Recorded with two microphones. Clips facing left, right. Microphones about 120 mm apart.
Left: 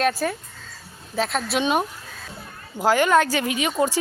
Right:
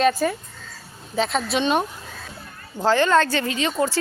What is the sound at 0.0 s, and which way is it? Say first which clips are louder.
A woman's voice: right 3 dB; centre (ahead or behind).